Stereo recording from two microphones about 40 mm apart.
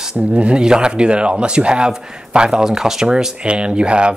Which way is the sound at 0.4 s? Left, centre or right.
Right.